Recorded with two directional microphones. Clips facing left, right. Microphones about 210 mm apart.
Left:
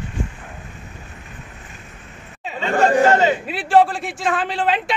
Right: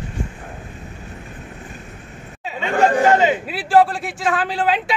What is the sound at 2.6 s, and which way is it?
Chatter, 15° right (ahead or behind).